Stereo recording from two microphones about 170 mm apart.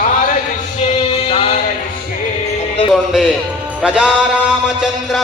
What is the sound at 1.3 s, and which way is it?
Music, 35° left (ahead or behind).